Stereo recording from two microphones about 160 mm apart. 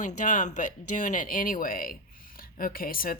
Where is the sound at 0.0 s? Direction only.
50° left (ahead or behind).